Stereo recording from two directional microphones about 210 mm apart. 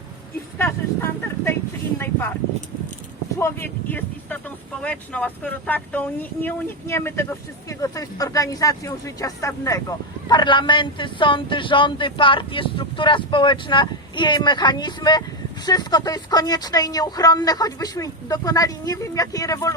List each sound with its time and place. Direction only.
0.6 s speech: 10° left (ahead or behind)
3.3 s speech: 10° left (ahead or behind)